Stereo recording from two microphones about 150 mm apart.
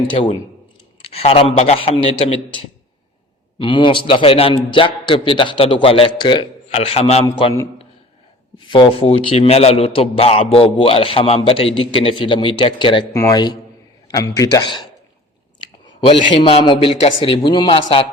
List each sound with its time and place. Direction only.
0.1 s a man's voice: 40° left (ahead or behind)
3.6 s a man's voice: 35° left (ahead or behind)
6.7 s a man's voice: 45° left (ahead or behind)
8.5 s a man's voice: 35° left (ahead or behind)